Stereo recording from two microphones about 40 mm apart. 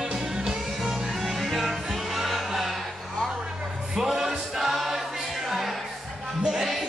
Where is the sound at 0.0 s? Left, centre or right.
Centre.